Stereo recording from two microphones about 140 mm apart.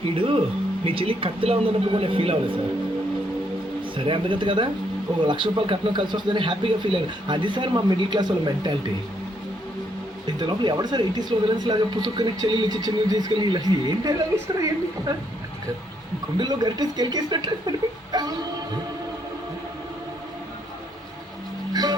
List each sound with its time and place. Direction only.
0.0 s speech: 40° right (ahead or behind)
3.9 s speech: 35° right (ahead or behind)
10.2 s speech: 30° right (ahead or behind)
16.4 s speech: 30° right (ahead or behind)
21.7 s music: 30° right (ahead or behind)